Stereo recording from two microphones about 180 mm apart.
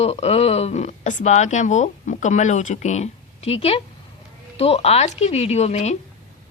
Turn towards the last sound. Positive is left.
turn(degrees=40)  # may be behind; listen again after turning